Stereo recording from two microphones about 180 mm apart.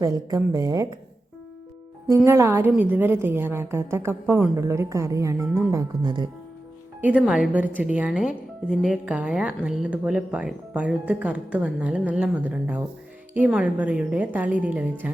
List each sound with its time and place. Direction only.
0.0 s a woman's voice: 20° right (ahead or behind)
2.2 s a woman's voice: 15° right (ahead or behind)
7.0 s a woman's voice: 5° right (ahead or behind)